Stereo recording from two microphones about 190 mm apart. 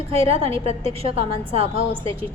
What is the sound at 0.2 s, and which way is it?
A woman's voice, 30° right (ahead or behind).